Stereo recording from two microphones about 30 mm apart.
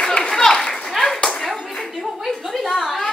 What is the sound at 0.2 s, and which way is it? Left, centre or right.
Clapping, centre.